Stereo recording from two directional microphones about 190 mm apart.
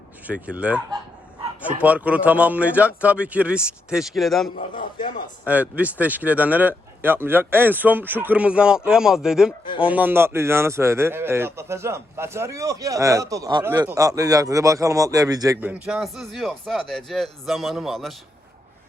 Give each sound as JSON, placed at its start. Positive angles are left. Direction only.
{"t": 0.3, "sound": "speech", "side_deg": -5}
{"t": 4.4, "sound": "a man's voice", "side_deg": 45}
{"t": 5.5, "sound": "speech", "side_deg": -10}
{"t": 15.6, "sound": "speech", "side_deg": -5}